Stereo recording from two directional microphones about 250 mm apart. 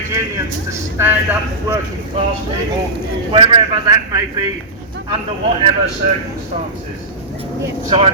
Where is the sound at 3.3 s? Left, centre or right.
Centre.